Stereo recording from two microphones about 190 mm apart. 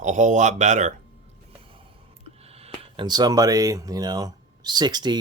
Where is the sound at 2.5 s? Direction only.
30° right (ahead or behind).